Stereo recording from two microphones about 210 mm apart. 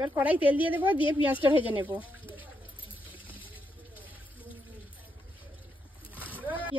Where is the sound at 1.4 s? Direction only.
10° right (ahead or behind).